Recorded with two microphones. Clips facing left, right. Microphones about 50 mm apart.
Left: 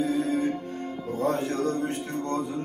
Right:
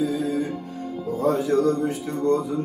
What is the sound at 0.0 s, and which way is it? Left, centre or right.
Music, left.